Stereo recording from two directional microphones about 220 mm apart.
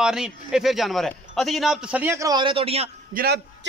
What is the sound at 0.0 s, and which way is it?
A man's voice, 5° right (ahead or behind).